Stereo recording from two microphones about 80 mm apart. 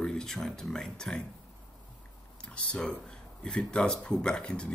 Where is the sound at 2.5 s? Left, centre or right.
Centre.